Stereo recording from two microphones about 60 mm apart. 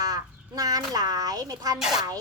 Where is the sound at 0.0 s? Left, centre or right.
Right.